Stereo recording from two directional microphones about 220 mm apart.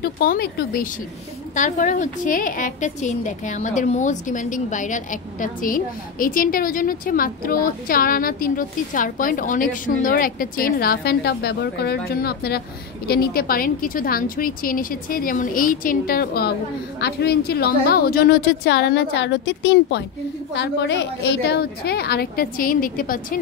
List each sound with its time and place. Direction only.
0.0 s a woman's voice: 45° left (ahead or behind)